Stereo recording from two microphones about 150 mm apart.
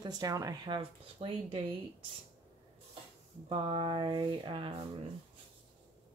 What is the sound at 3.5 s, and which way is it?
Speech, 35° right (ahead or behind).